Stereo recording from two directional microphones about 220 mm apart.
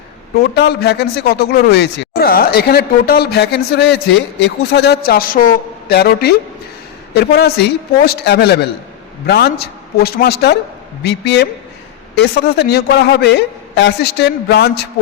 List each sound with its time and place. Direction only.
0.3 s a man's voice: 50° left (ahead or behind)